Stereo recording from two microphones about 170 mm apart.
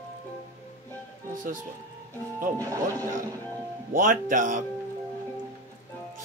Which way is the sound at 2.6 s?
20° right (ahead or behind).